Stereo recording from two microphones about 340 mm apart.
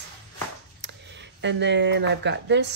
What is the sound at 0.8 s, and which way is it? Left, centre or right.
Speech, right.